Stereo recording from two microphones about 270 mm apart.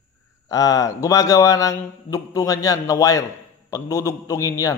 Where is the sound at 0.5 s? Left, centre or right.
Centre.